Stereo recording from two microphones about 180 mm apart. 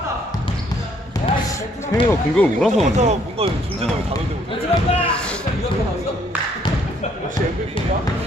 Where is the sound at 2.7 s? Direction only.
40° right (ahead or behind).